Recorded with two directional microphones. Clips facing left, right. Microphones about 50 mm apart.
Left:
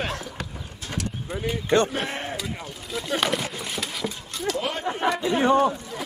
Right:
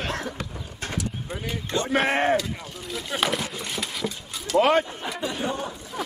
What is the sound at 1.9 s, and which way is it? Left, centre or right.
Speech, right.